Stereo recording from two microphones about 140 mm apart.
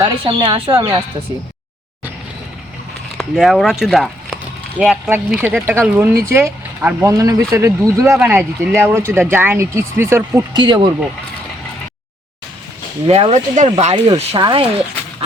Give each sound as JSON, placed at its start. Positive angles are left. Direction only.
{"t": 0.0, "sound": "speech", "side_deg": -30}
{"t": 3.2, "sound": "speech", "side_deg": 0}
{"t": 5.0, "sound": "speech", "side_deg": -10}
{"t": 8.2, "sound": "speech", "side_deg": -5}
{"t": 10.5, "sound": "speech", "side_deg": -35}
{"t": 13.1, "sound": "speech", "side_deg": -50}
{"t": 14.2, "sound": "speech", "side_deg": -35}